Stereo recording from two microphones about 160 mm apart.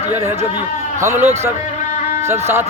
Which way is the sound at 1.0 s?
15° right (ahead or behind).